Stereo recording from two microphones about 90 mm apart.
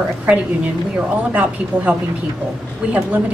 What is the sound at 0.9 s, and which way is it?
A woman's voice, 15° right (ahead or behind).